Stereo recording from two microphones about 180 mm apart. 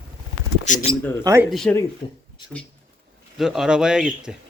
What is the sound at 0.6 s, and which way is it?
Speech, 40° left (ahead or behind).